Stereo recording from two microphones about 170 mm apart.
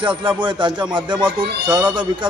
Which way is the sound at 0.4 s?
25° right (ahead or behind).